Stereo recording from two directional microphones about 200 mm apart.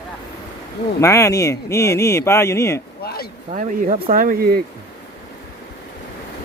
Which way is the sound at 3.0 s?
50° left (ahead or behind).